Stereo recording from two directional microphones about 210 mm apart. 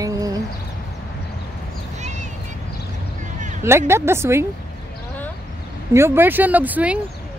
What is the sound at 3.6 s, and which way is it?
Speech, 10° right (ahead or behind).